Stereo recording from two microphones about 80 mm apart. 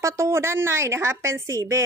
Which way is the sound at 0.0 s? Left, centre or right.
Right.